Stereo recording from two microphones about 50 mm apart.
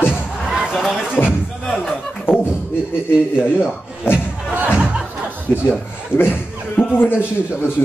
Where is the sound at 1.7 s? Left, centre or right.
Centre.